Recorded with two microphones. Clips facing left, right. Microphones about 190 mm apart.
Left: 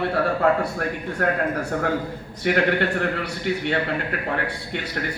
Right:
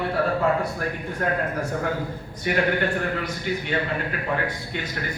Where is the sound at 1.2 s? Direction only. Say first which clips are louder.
Left 2 dB; 65° left (ahead or behind).